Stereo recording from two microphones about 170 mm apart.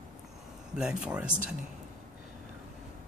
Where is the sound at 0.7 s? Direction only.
5° right (ahead or behind).